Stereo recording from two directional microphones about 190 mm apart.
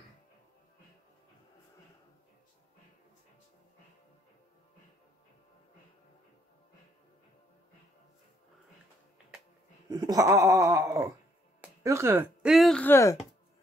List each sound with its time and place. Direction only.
9.8 s speech: 20° right (ahead or behind); by 13.2 s 15° left (ahead or behind)